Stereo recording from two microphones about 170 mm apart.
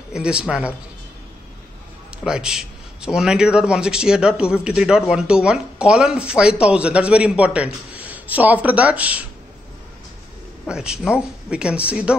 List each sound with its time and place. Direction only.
0.1 s a man's voice: 5° right (ahead or behind)
2.2 s a man's voice: 5° right (ahead or behind)
10.7 s a man's voice: 5° right (ahead or behind)